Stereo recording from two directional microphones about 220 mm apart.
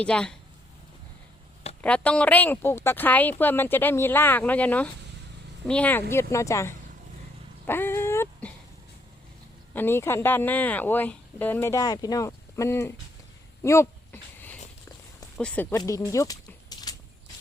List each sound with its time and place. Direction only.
0.0 s speech: 5° left (ahead or behind)
1.8 s speech: 5° left (ahead or behind)
7.7 s dog: 10° left (ahead or behind)
9.7 s speech: 10° left (ahead or behind)
13.6 s a sound: 10° left (ahead or behind)
15.4 s speech: 5° left (ahead or behind)
15.7 s speech: 15° left (ahead or behind)